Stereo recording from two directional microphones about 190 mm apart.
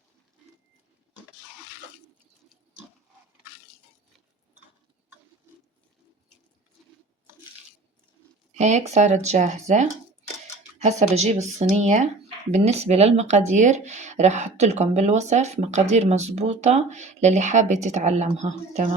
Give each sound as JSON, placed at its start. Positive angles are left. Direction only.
{"t": 8.5, "sound": "speech", "side_deg": -40}